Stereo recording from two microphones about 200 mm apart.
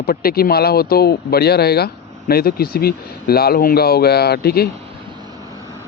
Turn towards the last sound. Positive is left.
turn(degrees=-15)  # may be behind; listen again after turning